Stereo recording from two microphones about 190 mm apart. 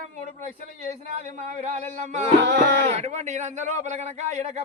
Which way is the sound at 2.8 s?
35° right (ahead or behind).